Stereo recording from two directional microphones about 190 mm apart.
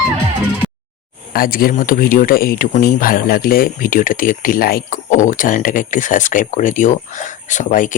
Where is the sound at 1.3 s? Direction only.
50° left (ahead or behind).